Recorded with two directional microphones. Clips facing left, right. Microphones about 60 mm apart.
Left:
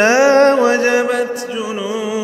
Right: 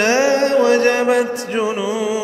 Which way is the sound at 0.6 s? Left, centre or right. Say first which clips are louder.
Left 1 dB; left.